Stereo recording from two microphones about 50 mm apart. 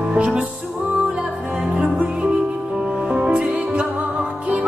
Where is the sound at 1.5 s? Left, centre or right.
Right.